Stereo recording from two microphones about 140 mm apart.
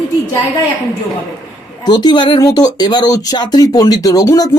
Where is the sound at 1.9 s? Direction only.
30° left (ahead or behind).